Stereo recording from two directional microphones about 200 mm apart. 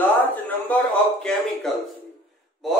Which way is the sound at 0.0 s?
10° left (ahead or behind).